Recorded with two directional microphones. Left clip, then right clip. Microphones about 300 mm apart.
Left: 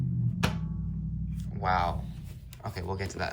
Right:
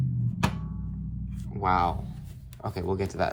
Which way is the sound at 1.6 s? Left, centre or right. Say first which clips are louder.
Right 3 dB; centre.